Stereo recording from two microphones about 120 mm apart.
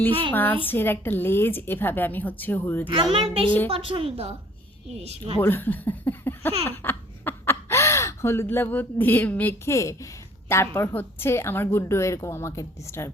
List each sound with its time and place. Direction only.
0.3 s speech: 15° left (ahead or behind)
2.8 s a woman's voice: 45° right (ahead or behind)
5.4 s a woman's voice: 15° left (ahead or behind)